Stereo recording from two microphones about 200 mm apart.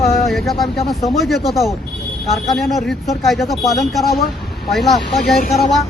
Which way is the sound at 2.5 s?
Centre (ahead or behind).